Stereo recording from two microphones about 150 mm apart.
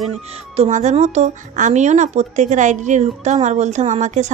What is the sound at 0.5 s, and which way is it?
Speech, 55° right (ahead or behind).